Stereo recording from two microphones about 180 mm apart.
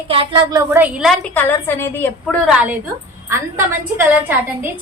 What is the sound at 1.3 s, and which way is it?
A woman's voice, 15° left (ahead or behind).